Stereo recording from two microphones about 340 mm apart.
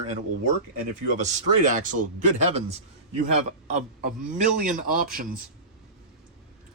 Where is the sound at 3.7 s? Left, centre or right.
Right.